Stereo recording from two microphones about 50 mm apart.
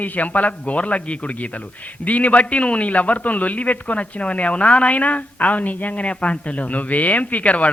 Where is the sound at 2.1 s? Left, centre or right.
Left.